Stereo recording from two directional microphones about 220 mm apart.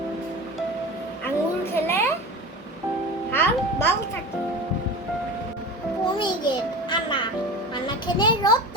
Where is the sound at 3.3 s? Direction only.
10° left (ahead or behind).